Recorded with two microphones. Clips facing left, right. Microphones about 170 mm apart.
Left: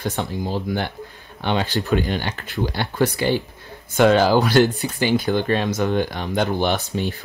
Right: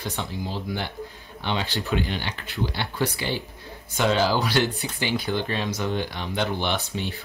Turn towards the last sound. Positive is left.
turn(degrees=40)  # may be behind; listen again after turning